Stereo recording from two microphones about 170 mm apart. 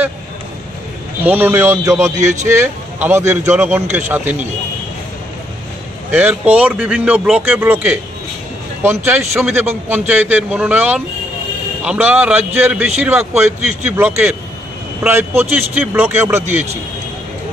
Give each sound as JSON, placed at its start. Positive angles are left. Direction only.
{"t": 1.2, "sound": "speech", "side_deg": -10}
{"t": 2.2, "sound": "speech", "side_deg": -45}
{"t": 2.5, "sound": "speech", "side_deg": -15}
{"t": 6.1, "sound": "speech", "side_deg": -10}